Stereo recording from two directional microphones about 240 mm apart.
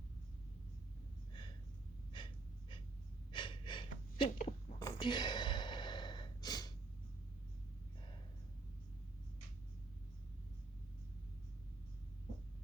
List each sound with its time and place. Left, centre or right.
2.1 s breathing: centre
3.3 s gasp: centre
4.4 s a sound: left
4.8 s gasp: centre